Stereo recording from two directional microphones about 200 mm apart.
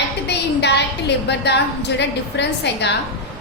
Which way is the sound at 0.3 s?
60° left (ahead or behind).